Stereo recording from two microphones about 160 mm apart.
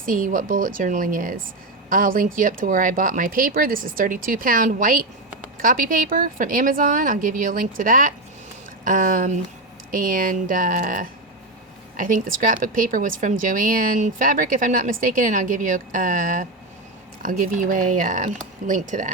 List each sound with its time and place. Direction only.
0.0 s speech: 55° right (ahead or behind)